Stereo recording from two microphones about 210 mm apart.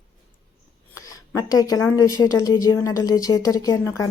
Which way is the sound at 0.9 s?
15° left (ahead or behind).